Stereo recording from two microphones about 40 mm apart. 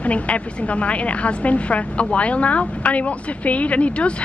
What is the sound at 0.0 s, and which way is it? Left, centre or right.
A woman's voice, left.